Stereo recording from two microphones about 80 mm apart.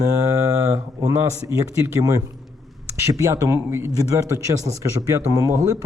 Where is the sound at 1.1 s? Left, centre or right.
Right.